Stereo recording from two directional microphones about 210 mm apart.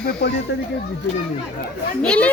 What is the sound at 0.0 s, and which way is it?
Speech, 50° left (ahead or behind).